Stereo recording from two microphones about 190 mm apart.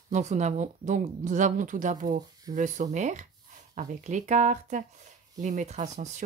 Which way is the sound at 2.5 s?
40° right (ahead or behind).